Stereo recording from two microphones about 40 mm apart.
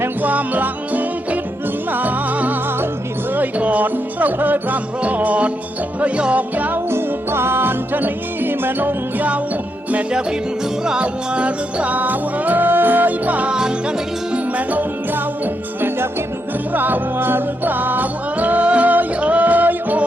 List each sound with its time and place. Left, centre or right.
0.2 s music: right
5.0 s music: right
6.9 s music: right
11.0 s music: right
13.5 s music: right
14.3 s music: right
16.7 s music: right